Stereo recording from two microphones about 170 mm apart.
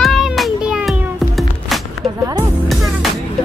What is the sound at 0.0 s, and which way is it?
Music, centre (ahead or behind).